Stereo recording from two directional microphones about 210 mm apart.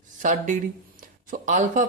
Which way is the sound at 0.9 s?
40° right (ahead or behind).